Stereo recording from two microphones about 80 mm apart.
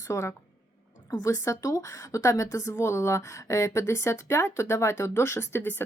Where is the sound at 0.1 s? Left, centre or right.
Left.